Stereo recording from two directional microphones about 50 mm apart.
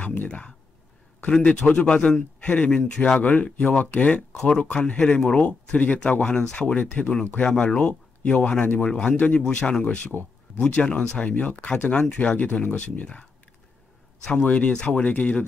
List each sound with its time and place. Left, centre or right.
0.0 s speech: left
0.3 s speech: centre
3.2 s speech: left
4.3 s speech: centre
11.2 s speech: left